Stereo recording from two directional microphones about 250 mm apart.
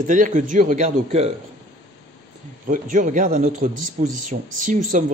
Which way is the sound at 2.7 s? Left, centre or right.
Right.